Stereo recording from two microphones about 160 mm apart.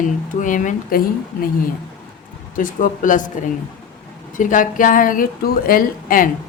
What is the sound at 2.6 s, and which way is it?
Speech, 55° left (ahead or behind).